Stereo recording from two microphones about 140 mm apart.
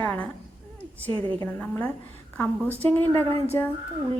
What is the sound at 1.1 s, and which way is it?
Speech, 35° right (ahead or behind).